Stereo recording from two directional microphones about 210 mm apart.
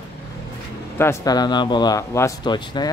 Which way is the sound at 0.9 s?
10° left (ahead or behind).